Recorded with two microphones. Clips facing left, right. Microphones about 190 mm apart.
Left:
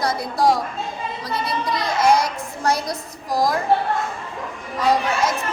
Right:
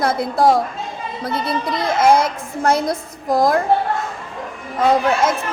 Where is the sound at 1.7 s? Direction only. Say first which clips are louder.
Right 3 dB; 55° right (ahead or behind).